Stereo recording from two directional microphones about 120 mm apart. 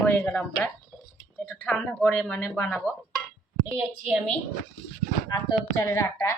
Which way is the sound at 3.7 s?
15° right (ahead or behind).